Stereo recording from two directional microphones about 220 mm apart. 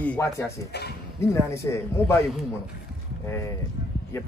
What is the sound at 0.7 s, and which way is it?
Speech, 50° left (ahead or behind).